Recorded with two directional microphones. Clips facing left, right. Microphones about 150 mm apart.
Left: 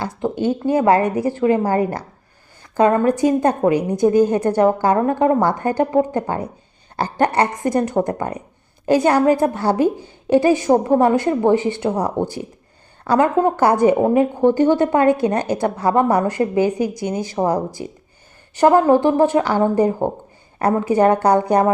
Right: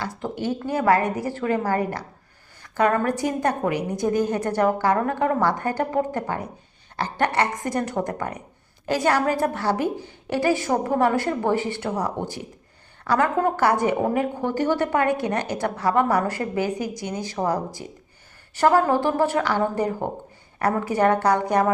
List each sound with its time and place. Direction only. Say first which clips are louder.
0.0 s a woman's voice: left 7 dB; 20° left (ahead or behind)